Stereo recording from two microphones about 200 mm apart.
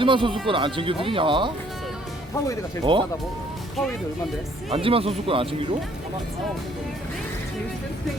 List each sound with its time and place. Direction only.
0.0 s speech: 25° right (ahead or behind)
2.9 s speech: 25° right (ahead or behind)
4.7 s speech: 30° right (ahead or behind)